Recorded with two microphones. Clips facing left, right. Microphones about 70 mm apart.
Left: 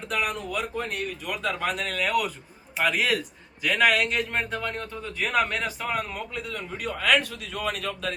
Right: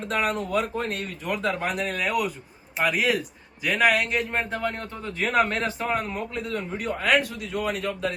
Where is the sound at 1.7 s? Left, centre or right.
Centre.